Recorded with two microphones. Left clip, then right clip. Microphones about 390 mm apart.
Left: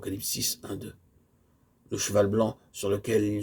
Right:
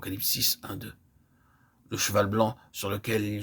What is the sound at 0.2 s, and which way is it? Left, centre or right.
Speech, right.